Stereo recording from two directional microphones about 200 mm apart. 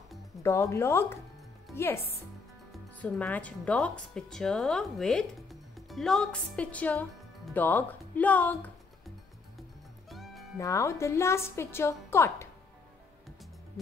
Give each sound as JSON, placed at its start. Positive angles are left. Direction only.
{"t": 0.4, "sound": "a woman's voice", "side_deg": 15}
{"t": 3.0, "sound": "a woman's voice", "side_deg": 10}
{"t": 10.0, "sound": "music", "side_deg": 0}
{"t": 10.6, "sound": "a woman's voice", "side_deg": 15}